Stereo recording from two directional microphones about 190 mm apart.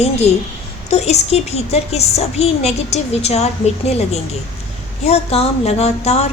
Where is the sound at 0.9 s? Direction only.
35° left (ahead or behind).